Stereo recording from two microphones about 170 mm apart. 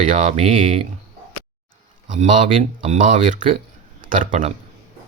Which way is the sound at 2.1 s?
50° right (ahead or behind).